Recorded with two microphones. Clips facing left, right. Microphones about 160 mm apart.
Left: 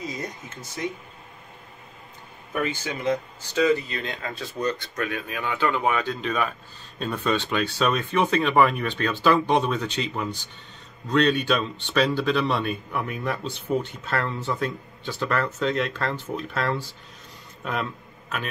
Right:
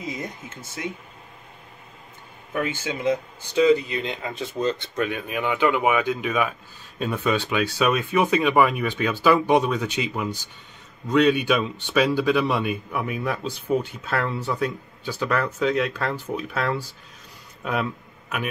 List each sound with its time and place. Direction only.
2.6 s speech: 15° right (ahead or behind)